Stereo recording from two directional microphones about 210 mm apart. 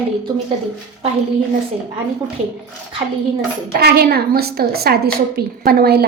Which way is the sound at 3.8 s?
50° right (ahead or behind).